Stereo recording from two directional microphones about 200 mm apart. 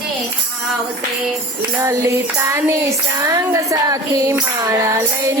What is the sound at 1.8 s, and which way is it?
Music, 15° right (ahead or behind).